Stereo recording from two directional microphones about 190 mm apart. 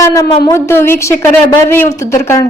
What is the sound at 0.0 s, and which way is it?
A woman's voice, 20° left (ahead or behind).